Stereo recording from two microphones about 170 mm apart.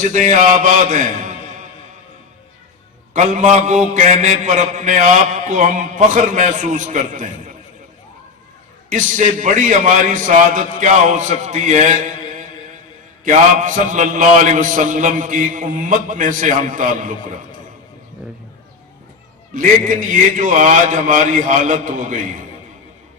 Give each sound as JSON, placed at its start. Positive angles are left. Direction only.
{"t": 0.0, "sound": "a man's voice", "side_deg": -45}
{"t": 3.1, "sound": "mantra", "side_deg": -45}
{"t": 8.9, "sound": "mantra", "side_deg": -50}
{"t": 19.5, "sound": "mantra", "side_deg": -50}